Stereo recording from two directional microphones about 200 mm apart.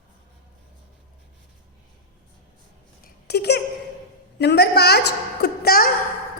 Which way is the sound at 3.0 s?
55° left (ahead or behind).